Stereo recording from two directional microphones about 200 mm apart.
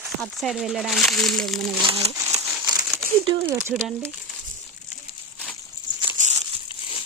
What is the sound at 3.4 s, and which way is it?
Speech, 10° right (ahead or behind).